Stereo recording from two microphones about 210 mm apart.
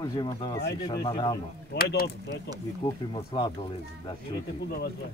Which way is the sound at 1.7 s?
45° left (ahead or behind).